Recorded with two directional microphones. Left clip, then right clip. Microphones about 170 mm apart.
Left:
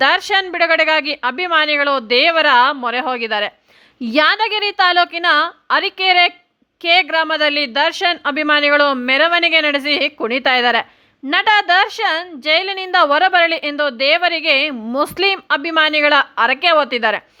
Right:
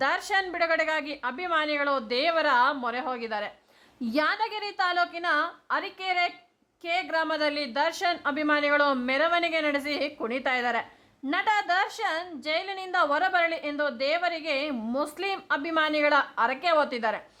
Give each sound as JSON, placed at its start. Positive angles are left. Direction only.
{"t": 0.0, "sound": "a woman's voice", "side_deg": 30}